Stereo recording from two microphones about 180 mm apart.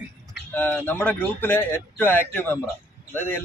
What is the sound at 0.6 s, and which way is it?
Speech, 10° left (ahead or behind).